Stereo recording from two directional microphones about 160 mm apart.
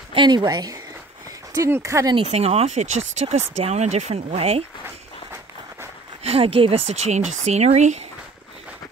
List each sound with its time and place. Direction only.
0.1 s a woman's voice: 30° right (ahead or behind)
2.3 s speech: 40° right (ahead or behind)
4.8 s walk: 15° right (ahead or behind)
6.2 s speech: 35° right (ahead or behind)